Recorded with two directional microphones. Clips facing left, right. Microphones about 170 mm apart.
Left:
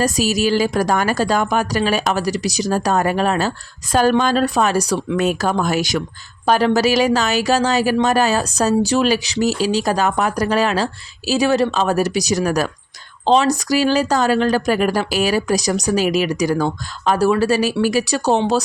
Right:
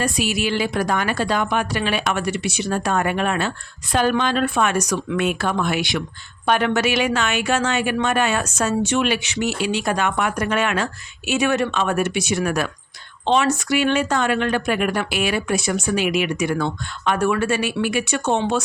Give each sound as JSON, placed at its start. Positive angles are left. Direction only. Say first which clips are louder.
{"t": 0.0, "sound": "speech", "louder": "left 5 dB", "side_deg": 40}